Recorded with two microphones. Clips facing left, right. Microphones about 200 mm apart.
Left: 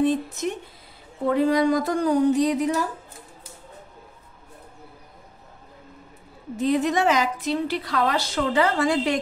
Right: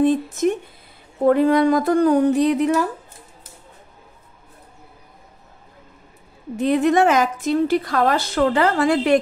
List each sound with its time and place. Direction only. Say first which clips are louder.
0.0 s a sound: right 5 dB; 50° right (ahead or behind)
1.2 s a woman's voice: right 5 dB; 55° right (ahead or behind)
6.5 s a woman's voice: right 5 dB; 60° right (ahead or behind)